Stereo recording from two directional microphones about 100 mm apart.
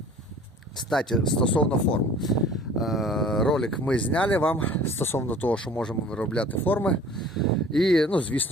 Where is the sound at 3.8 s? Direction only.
15° left (ahead or behind).